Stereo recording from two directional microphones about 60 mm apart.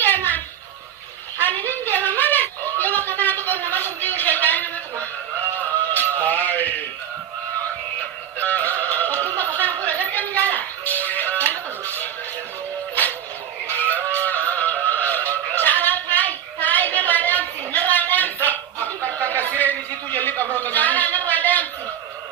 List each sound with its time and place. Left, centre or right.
0.0 s a sound: left
5.5 s music: left
6.2 s mantra: left
8.4 s music: left
13.7 s fowl: left
14.3 s music: left
15.5 s a sound: left